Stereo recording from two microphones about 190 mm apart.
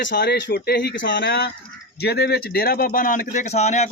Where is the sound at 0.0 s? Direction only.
65° left (ahead or behind).